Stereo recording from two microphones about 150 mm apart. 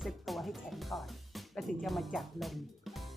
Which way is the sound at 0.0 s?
Centre (ahead or behind).